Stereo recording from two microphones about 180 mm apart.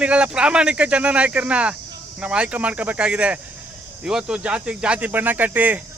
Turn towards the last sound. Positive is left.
turn(degrees=-10)  # may be behind; listen again after turning